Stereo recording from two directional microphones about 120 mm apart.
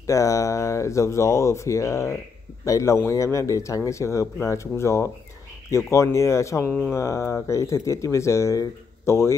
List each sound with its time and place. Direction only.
0.0 s speech: 25° left (ahead or behind)